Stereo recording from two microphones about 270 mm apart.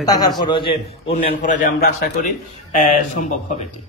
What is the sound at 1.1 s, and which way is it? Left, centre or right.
A man's voice, left.